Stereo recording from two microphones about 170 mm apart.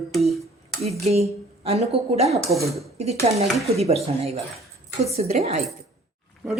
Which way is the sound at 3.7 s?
40° right (ahead or behind).